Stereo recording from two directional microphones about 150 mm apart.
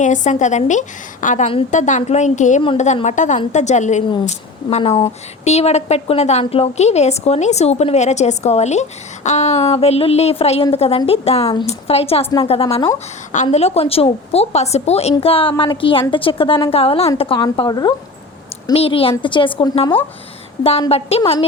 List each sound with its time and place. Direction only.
0.0 s a woman's voice: 55° left (ahead or behind)
4.8 s a woman's voice: 35° left (ahead or behind)
13.3 s a woman's voice: 50° left (ahead or behind); by 17.9 s 30° left (ahead or behind)
18.7 s a woman's voice: 40° left (ahead or behind)
21.2 s a woman's voice: 30° left (ahead or behind)